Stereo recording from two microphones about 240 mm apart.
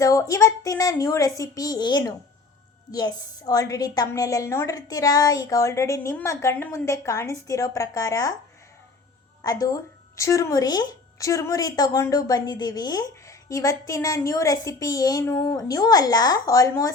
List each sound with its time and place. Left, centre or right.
0.0 s speech: centre
9.4 s speech: centre